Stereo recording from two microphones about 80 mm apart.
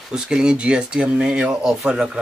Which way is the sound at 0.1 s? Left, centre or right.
Centre.